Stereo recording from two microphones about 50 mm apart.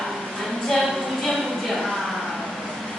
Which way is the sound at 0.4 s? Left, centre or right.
Centre.